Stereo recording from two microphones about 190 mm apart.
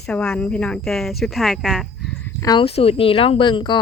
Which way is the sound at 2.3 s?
15° left (ahead or behind).